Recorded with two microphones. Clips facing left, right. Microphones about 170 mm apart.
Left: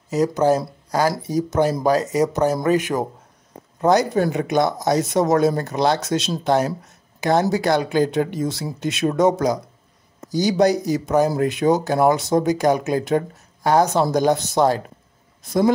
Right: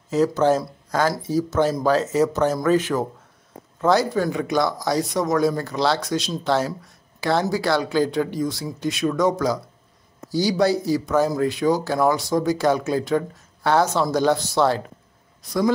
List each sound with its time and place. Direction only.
0.1 s speech: 10° left (ahead or behind)